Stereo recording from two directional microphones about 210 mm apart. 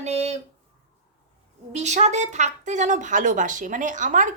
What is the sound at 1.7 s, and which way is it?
Speech, 35° right (ahead or behind).